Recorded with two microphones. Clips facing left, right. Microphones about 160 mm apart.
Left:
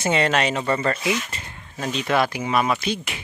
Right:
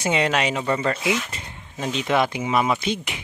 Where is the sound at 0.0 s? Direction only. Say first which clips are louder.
Left 1 dB; 10° right (ahead or behind).